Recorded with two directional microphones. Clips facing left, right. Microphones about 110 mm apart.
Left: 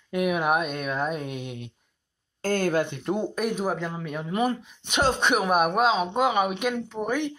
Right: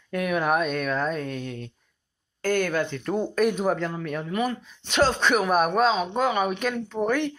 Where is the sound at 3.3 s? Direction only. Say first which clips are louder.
Right 4 dB; 5° left (ahead or behind).